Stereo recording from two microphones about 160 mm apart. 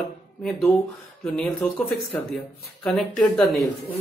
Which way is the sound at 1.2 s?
5° left (ahead or behind).